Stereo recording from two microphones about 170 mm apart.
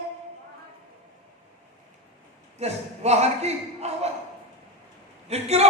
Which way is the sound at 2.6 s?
40° right (ahead or behind).